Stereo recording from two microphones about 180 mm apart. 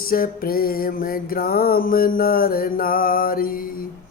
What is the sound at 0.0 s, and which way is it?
Music, 55° left (ahead or behind).